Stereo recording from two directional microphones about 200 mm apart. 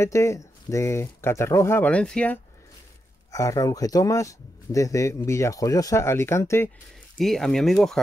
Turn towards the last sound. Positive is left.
turn(degrees=0)  # may be behind; listen again after turning